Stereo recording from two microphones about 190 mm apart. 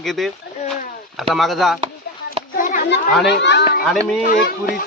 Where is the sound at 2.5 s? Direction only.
45° left (ahead or behind).